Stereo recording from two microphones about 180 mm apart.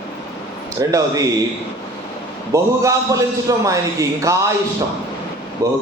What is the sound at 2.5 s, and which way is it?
A man's voice, 15° right (ahead or behind).